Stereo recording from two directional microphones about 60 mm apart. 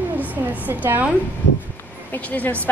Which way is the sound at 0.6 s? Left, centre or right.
Right.